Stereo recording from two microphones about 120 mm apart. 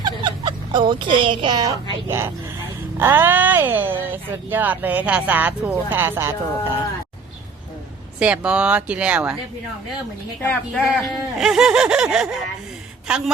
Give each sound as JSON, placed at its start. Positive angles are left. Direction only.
{"t": 0.0, "sound": "turkey", "side_deg": -40}
{"t": 2.0, "sound": "speech", "side_deg": -20}
{"t": 8.2, "sound": "speech", "side_deg": -10}
{"t": 10.4, "sound": "speech", "side_deg": 15}
{"t": 11.0, "sound": "speech", "side_deg": 0}